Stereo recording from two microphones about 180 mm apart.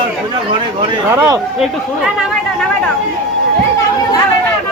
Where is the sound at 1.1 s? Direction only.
20° right (ahead or behind).